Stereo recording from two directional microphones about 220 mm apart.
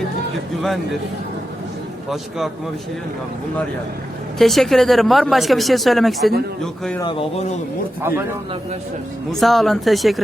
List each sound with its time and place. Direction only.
4.4 s speech: centre (ahead or behind)
7.0 s speech: 25° left (ahead or behind)
9.3 s speech: centre (ahead or behind)